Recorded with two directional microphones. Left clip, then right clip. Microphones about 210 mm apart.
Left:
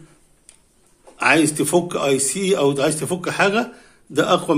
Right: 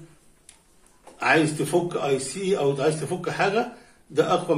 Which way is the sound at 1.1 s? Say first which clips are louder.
Left 4 dB; 50° left (ahead or behind).